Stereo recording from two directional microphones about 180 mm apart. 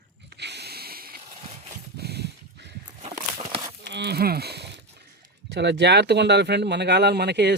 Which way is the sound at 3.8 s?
70° right (ahead or behind).